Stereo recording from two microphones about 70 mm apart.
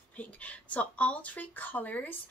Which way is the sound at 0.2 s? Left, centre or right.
Left.